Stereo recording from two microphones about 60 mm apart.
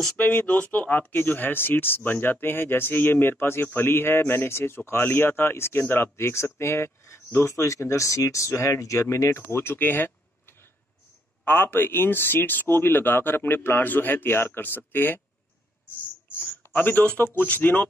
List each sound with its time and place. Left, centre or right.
0.2 s speech: left
11.4 s speech: left
16.7 s speech: left